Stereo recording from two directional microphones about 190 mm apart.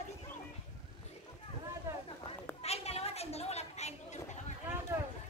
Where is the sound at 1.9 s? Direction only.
15° right (ahead or behind).